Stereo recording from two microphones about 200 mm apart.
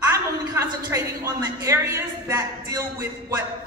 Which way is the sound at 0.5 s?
15° right (ahead or behind).